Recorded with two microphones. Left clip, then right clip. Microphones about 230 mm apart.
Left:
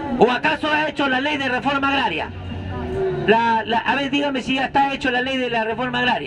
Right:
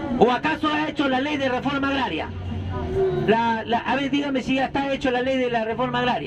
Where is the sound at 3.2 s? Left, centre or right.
Left.